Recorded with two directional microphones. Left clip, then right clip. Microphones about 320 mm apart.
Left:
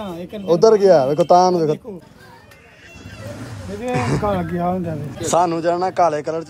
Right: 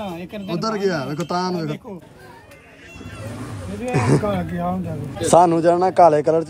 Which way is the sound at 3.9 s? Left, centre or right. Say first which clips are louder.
Right 3 dB; centre.